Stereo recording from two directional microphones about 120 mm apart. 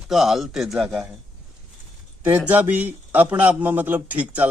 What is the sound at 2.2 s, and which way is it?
Speech, 15° right (ahead or behind).